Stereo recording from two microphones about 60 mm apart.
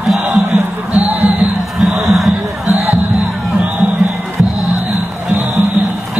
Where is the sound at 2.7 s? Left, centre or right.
Right.